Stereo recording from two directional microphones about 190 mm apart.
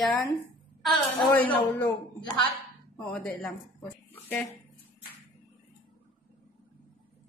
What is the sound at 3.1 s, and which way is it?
Speech, 5° left (ahead or behind).